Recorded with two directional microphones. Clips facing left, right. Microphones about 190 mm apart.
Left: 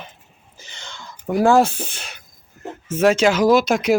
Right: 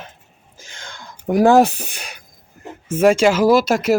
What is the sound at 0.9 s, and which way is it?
Speech, 15° right (ahead or behind).